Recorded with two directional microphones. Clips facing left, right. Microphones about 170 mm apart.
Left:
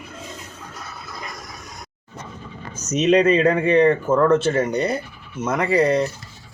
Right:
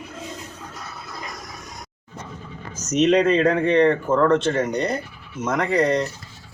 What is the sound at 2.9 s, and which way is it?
Speech, centre (ahead or behind).